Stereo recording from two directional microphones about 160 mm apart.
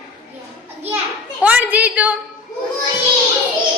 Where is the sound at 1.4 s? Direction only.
10° right (ahead or behind).